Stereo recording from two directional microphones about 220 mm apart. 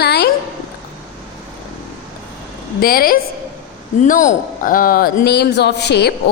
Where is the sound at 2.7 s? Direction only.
40° left (ahead or behind).